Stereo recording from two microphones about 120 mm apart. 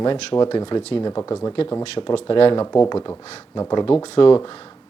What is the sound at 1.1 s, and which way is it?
Speech, 25° left (ahead or behind).